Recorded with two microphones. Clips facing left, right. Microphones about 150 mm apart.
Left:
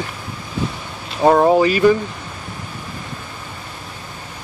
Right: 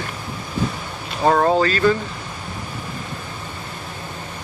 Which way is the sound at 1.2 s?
10° left (ahead or behind).